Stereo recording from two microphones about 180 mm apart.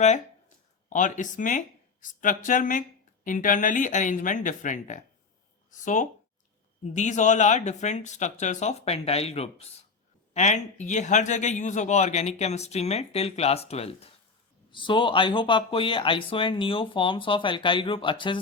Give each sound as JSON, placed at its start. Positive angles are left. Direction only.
{"t": 0.9, "sound": "speech", "side_deg": 45}